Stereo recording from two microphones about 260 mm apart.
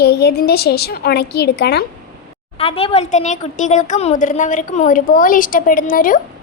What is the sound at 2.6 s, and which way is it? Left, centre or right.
A woman's voice, left.